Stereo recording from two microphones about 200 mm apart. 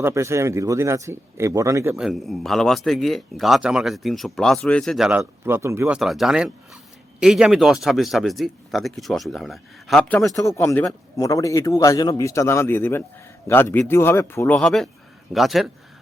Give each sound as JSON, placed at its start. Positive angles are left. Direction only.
{"t": 0.0, "sound": "speech", "side_deg": -15}
{"t": 2.0, "sound": "speech", "side_deg": 0}
{"t": 6.0, "sound": "speech", "side_deg": 0}
{"t": 10.3, "sound": "a man's voice", "side_deg": 15}